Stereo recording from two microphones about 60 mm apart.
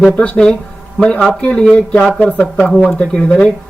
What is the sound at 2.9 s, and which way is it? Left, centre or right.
Speech, centre.